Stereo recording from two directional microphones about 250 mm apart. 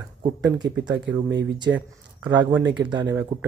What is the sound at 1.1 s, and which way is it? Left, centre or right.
Speech, right.